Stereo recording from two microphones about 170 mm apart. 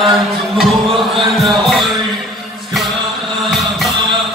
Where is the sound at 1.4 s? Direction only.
Centre (ahead or behind).